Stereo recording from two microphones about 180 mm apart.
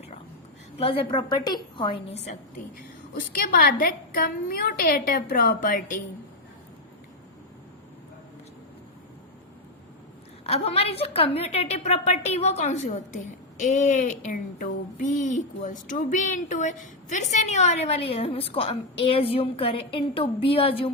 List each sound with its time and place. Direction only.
0.8 s a woman's voice: 30° left (ahead or behind)
2.7 s a woman's voice: 50° left (ahead or behind)
10.4 s a woman's voice: 35° left (ahead or behind)